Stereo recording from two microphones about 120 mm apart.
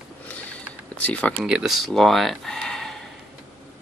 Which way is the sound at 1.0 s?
10° left (ahead or behind).